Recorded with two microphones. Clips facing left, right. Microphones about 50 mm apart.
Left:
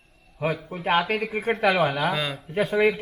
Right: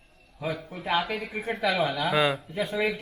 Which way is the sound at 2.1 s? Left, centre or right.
Centre.